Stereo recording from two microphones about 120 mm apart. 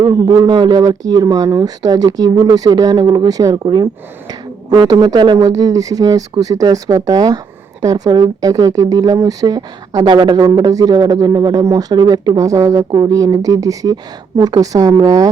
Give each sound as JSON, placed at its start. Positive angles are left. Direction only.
{"t": 0.0, "sound": "speech", "side_deg": -35}